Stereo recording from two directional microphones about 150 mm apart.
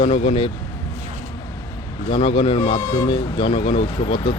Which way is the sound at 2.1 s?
35° left (ahead or behind).